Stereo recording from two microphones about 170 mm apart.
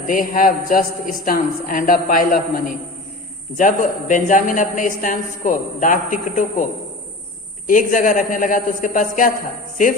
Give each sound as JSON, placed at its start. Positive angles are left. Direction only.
{"t": 0.1, "sound": "a woman's voice", "side_deg": 55}
{"t": 7.7, "sound": "a woman's voice", "side_deg": 50}